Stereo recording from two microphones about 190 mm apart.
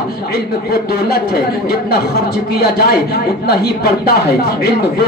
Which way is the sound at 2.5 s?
55° left (ahead or behind).